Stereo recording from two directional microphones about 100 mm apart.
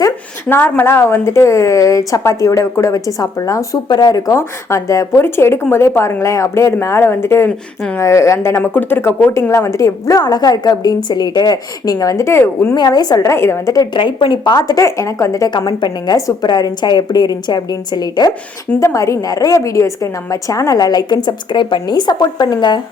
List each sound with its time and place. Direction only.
0.4 s speech: 15° left (ahead or behind); by 4.4 s 40° left (ahead or behind)
4.4 s speech: 30° left (ahead or behind)
12.7 s speech: 40° left (ahead or behind)
13.3 s speech: 25° left (ahead or behind)
13.9 s speech: 55° left (ahead or behind); by 15.4 s 30° left (ahead or behind)
15.4 s a woman's voice: 45° left (ahead or behind)
18.8 s speech: 30° left (ahead or behind); by 22.8 s 50° left (ahead or behind)